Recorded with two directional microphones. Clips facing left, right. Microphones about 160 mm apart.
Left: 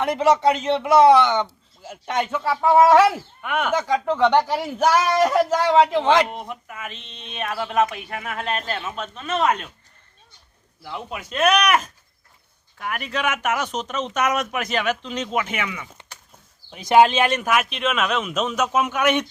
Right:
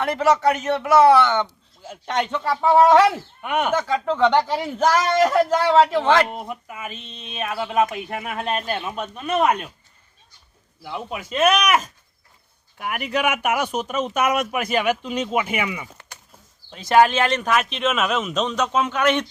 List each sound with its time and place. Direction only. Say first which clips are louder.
0.0 s a man's voice: left 1 dB; 20° left (ahead or behind)
3.4 s speech: right 2 dB; 15° right (ahead or behind)
3.7 s speech: even; 15° left (ahead or behind)
6.3 s speech: right 1 dB; 5° right (ahead or behind)
10.8 s speech: right 2 dB; centre (ahead or behind)
12.8 s speech: right 3 dB; 15° right (ahead or behind)
16.7 s speech: left 1 dB; 15° left (ahead or behind)